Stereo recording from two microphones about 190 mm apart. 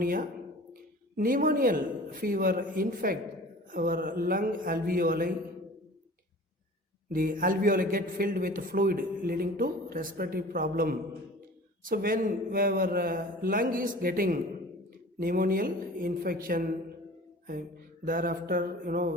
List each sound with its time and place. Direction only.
0.0 s a man's voice: 50° right (ahead or behind)
7.1 s a man's voice: 50° right (ahead or behind)
18.0 s a man's voice: 50° right (ahead or behind)